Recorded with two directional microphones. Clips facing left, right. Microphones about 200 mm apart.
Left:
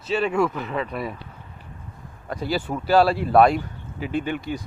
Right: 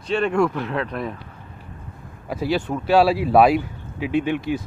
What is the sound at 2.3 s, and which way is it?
Speech, centre (ahead or behind).